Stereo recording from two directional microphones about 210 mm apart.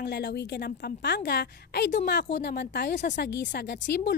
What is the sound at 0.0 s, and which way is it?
A woman's voice, 50° left (ahead or behind).